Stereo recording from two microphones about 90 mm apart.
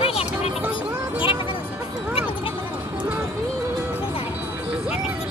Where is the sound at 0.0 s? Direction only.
90° left.